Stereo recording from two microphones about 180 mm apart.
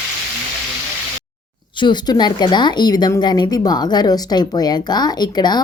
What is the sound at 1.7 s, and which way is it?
Speech, 25° left (ahead or behind).